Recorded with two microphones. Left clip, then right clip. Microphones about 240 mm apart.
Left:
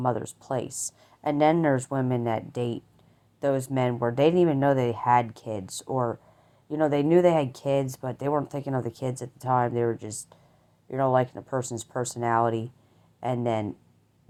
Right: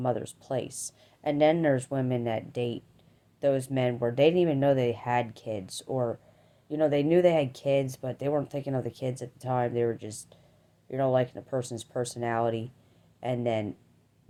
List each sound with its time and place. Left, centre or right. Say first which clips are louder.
0.0 s speech: left 2 dB; left